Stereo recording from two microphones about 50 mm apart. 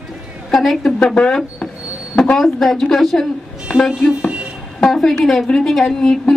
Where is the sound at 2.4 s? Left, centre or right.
Centre.